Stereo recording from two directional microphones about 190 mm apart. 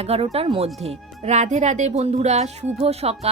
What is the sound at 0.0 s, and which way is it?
Speech, 35° right (ahead or behind).